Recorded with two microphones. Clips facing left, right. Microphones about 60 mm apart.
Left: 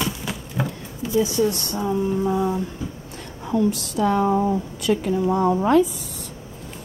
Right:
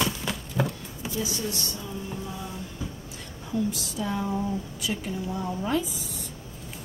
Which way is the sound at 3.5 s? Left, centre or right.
Left.